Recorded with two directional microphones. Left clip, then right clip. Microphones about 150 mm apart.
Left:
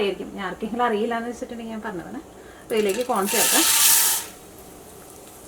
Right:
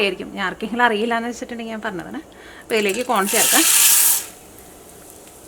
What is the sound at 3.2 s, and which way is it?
Speech, centre (ahead or behind).